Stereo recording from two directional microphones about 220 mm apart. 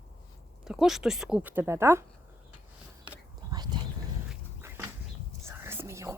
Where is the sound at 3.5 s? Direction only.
20° right (ahead or behind).